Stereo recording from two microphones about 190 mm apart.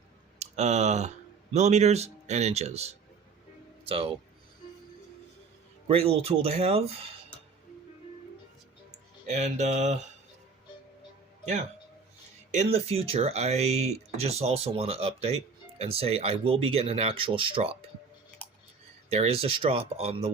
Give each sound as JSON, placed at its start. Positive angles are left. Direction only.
{"t": 0.3, "sound": "speech", "side_deg": -35}
{"t": 5.9, "sound": "speech", "side_deg": -30}
{"t": 9.3, "sound": "speech", "side_deg": -35}
{"t": 12.5, "sound": "speech", "side_deg": -35}
{"t": 19.1, "sound": "speech", "side_deg": -30}